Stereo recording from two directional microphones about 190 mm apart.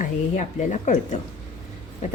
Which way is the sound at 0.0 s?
40° left (ahead or behind).